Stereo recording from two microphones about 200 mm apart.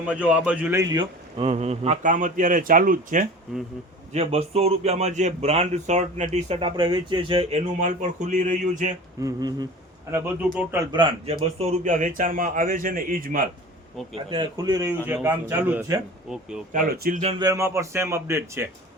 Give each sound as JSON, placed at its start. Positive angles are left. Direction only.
{"t": 0.0, "sound": "a man's voice", "side_deg": -5}
{"t": 1.5, "sound": "a man's voice", "side_deg": -35}
{"t": 4.1, "sound": "a man's voice", "side_deg": -30}
{"t": 9.2, "sound": "a sound", "side_deg": -20}
{"t": 10.5, "sound": "a man's voice", "side_deg": -5}
{"t": 10.9, "sound": "a man's voice", "side_deg": -25}
{"t": 14.3, "sound": "a man's voice", "side_deg": -20}
{"t": 16.7, "sound": "speech", "side_deg": -45}
{"t": 17.4, "sound": "a man's voice", "side_deg": -15}